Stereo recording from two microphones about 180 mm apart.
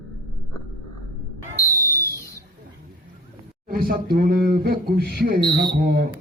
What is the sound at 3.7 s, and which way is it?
Speech, 55° right (ahead or behind).